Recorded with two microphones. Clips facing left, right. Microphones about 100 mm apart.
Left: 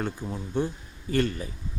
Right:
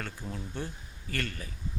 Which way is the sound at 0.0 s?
20° left (ahead or behind).